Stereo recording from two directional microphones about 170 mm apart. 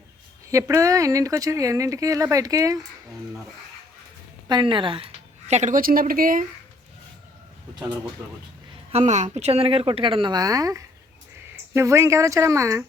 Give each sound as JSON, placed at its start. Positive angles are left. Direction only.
{"t": 0.5, "sound": "speech", "side_deg": -20}
{"t": 4.4, "sound": "a woman's voice", "side_deg": -25}
{"t": 8.9, "sound": "speech", "side_deg": -40}